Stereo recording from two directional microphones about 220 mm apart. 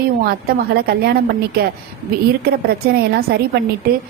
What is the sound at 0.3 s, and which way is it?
A woman's voice, 45° right (ahead or behind).